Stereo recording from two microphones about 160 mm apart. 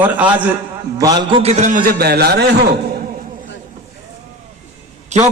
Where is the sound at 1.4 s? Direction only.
45° right (ahead or behind); by 2.4 s 85° right.